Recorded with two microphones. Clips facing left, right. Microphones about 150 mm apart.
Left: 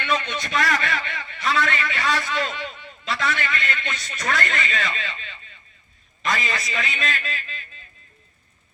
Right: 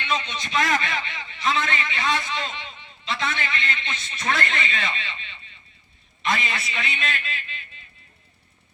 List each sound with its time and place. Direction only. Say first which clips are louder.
0.0 s a man's voice: left 3 dB; 50° left (ahead or behind)